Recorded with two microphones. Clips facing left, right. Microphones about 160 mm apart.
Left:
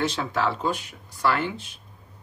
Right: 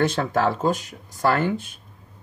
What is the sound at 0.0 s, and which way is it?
A man's voice, 50° right (ahead or behind).